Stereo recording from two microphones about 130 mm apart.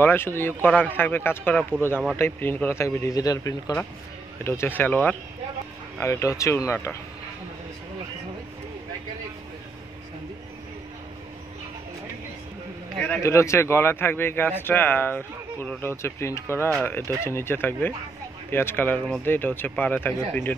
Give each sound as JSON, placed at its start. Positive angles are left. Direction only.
{"t": 0.0, "sound": "a man's voice", "side_deg": 15}
{"t": 1.7, "sound": "speech", "side_deg": -10}
{"t": 2.1, "sound": "a man's voice", "side_deg": 20}
{"t": 13.2, "sound": "a man's voice", "side_deg": 20}